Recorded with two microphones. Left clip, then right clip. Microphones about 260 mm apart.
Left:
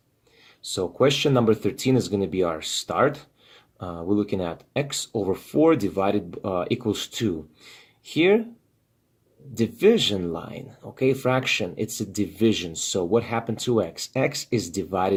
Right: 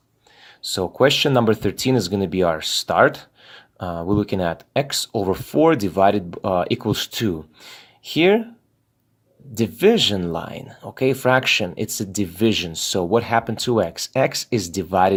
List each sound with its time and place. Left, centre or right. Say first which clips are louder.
0.6 s speech: right 4 dB; right
9.6 s speech: right 3 dB; right